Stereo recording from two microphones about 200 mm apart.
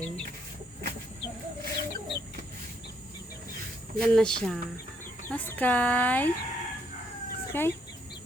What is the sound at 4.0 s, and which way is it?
Speech, 5° left (ahead or behind).